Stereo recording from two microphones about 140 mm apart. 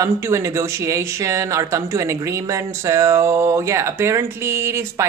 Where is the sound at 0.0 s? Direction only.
20° right (ahead or behind).